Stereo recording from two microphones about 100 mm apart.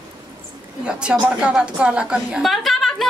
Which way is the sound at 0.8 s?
10° right (ahead or behind).